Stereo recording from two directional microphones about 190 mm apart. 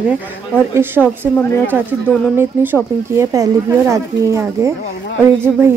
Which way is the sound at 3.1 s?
15° right (ahead or behind).